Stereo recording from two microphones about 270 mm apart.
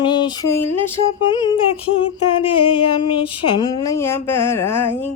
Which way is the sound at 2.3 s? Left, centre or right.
Centre.